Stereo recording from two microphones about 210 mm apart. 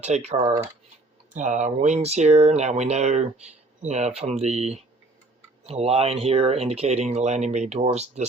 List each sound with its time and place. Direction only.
0.0 s speech: 30° right (ahead or behind)